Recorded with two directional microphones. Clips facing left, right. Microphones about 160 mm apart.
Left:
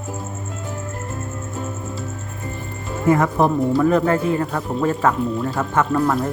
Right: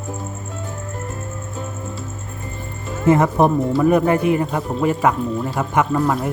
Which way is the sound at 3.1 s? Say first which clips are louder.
Right 2 dB; 20° right (ahead or behind).